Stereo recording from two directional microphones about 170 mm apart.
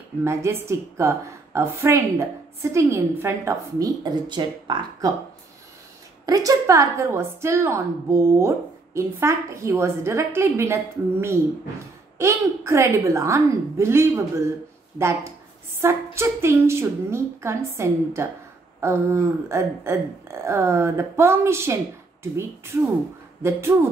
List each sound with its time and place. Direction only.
0.2 s a woman's voice: 15° right (ahead or behind)
6.2 s a woman's voice: 20° right (ahead or behind)